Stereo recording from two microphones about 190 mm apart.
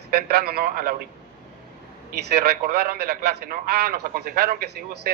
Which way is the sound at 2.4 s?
55° right (ahead or behind).